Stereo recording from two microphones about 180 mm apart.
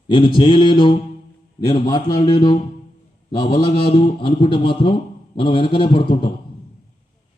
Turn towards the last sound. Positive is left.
turn(degrees=30)  # may be behind; listen again after turning